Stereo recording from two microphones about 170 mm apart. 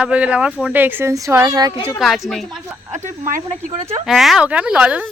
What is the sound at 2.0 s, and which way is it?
Speech, centre (ahead or behind).